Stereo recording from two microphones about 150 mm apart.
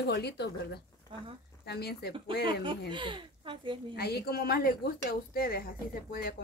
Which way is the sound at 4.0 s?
90° left.